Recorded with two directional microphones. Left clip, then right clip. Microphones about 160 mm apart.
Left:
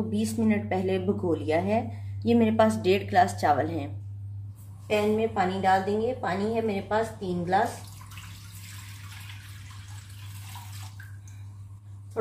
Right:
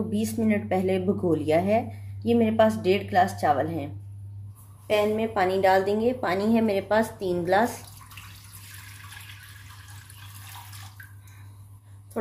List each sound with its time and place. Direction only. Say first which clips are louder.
0.1 s speech: right 1 dB; 25° right (ahead or behind)
2.2 s a woman's voice: right 1 dB; centre (ahead or behind)
4.8 s speech: right 1 dB; 90° right